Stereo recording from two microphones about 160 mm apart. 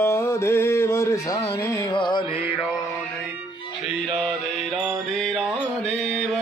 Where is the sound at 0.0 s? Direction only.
15° left (ahead or behind).